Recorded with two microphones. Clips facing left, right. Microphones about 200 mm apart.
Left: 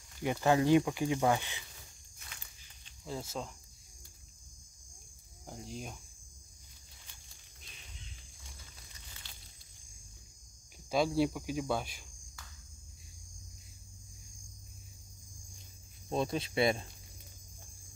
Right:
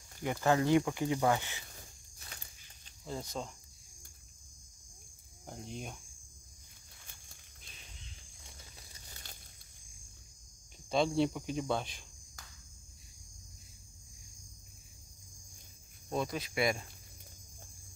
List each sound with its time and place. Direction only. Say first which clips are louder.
0.2 s speech: left 1 dB; 20° left (ahead or behind)
2.1 s walk: right 2 dB; 40° right (ahead or behind)
3.1 s cricket: even; centre (ahead or behind)
5.5 s cricket: even; centre (ahead or behind)
8.9 s a sound: right 2 dB; 40° right (ahead or behind)
10.9 s cricket: even; 5° left (ahead or behind)
16.1 s speech: left 2 dB; 25° left (ahead or behind)